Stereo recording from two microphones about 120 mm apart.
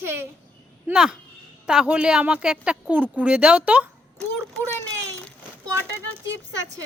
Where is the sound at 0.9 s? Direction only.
5° right (ahead or behind).